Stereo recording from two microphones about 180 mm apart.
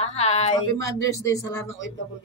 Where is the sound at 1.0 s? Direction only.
15° left (ahead or behind).